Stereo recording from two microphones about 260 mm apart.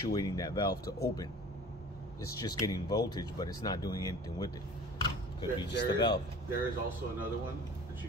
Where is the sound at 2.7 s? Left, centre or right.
Centre.